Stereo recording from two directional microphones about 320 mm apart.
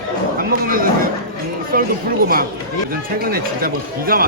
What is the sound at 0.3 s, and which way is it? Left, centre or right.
Speech, right.